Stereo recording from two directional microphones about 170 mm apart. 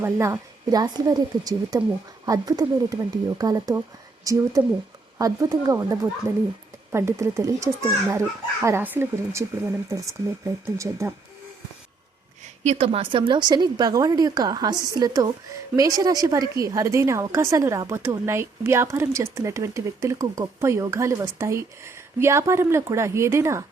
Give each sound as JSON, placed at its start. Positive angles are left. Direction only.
{"t": 0.0, "sound": "a woman's voice", "side_deg": -15}
{"t": 12.6, "sound": "a woman's voice", "side_deg": -35}